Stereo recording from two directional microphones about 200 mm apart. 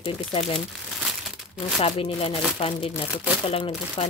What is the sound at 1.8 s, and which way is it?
Speech, 30° left (ahead or behind).